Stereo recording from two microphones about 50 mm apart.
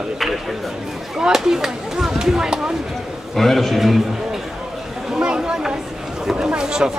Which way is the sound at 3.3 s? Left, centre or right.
Centre.